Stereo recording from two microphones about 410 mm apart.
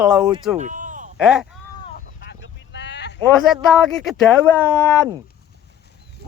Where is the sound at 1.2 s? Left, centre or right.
Centre.